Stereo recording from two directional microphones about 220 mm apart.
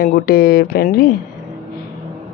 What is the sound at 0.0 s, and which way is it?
A woman's voice, 40° left (ahead or behind).